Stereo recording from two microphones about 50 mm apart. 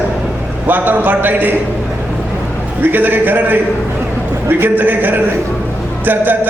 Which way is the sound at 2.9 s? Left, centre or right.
Right.